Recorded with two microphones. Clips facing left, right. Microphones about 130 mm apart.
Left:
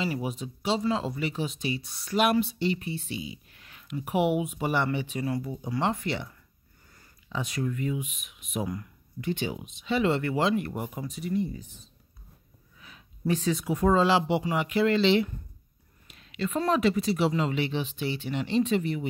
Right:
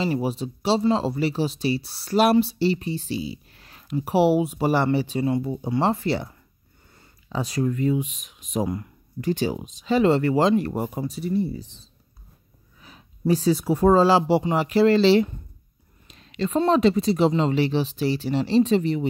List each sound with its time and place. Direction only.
0.0 s speech: 30° right (ahead or behind)
12.8 s speech: 35° right (ahead or behind)